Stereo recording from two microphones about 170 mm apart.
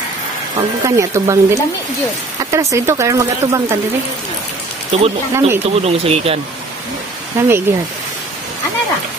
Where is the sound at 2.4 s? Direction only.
15° right (ahead or behind).